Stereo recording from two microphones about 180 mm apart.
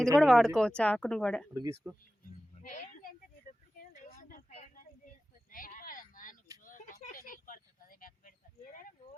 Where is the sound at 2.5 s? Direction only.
45° left (ahead or behind).